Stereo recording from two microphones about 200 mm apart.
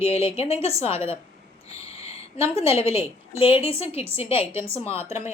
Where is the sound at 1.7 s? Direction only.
30° left (ahead or behind).